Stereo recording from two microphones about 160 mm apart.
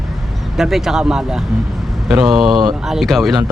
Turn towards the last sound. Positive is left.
turn(degrees=0)  # may be behind; listen again after turning